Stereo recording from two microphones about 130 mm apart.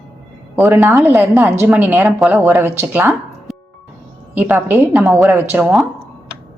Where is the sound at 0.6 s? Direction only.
20° right (ahead or behind).